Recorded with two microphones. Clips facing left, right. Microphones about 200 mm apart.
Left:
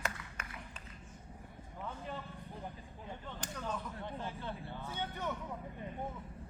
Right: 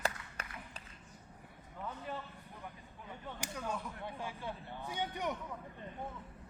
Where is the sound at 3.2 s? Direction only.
10° right (ahead or behind).